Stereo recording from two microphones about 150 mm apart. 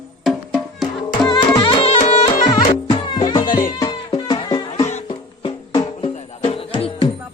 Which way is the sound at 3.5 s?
65° left (ahead or behind).